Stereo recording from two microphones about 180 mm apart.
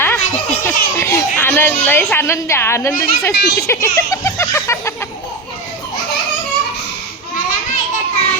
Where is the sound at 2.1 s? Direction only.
15° left (ahead or behind).